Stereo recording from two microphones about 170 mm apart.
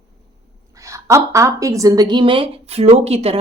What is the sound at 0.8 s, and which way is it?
A woman's voice, 15° right (ahead or behind).